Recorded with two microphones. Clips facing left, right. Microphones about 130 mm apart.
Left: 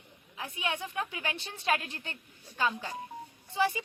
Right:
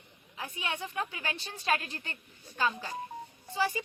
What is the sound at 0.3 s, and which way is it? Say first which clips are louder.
A woman's voice: left 2 dB; centre (ahead or behind).